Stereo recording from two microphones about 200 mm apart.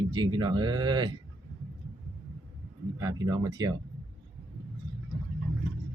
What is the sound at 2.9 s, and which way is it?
Speech, 20° right (ahead or behind).